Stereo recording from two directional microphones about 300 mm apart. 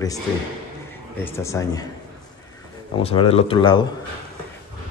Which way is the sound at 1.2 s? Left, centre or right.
Centre.